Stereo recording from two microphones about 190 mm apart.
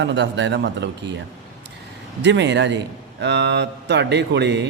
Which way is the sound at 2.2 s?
70° right (ahead or behind).